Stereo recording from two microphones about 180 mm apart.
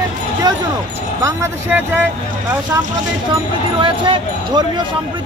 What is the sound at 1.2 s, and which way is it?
Speech, 15° right (ahead or behind).